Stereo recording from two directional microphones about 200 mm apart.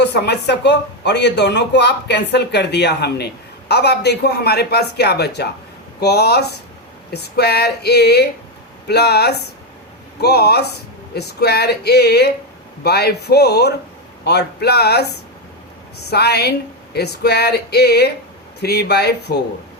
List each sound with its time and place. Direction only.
0.0 s speech: 55° left (ahead or behind)